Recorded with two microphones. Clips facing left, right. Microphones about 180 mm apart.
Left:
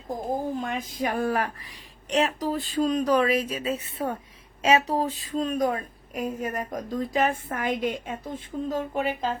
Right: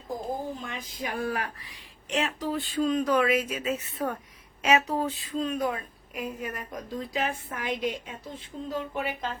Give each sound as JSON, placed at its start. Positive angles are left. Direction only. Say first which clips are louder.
{"t": 0.6, "sound": "a woman's voice", "louder": "left 7 dB", "side_deg": 50}